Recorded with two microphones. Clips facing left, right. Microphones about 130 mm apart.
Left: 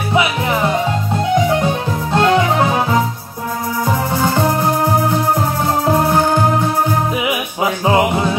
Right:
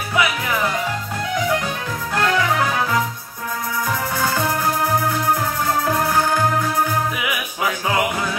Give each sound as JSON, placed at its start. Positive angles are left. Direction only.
{"t": 0.1, "sound": "music", "side_deg": 25}